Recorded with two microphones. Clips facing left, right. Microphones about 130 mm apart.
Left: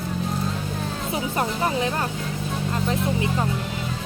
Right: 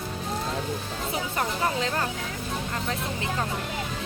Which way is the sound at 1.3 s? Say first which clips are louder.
Left 3 dB; 20° left (ahead or behind).